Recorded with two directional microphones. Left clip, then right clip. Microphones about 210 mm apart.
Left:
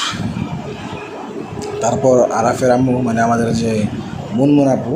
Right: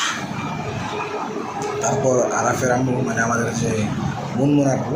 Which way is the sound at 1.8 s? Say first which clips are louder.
Left 7 dB; 55° left (ahead or behind).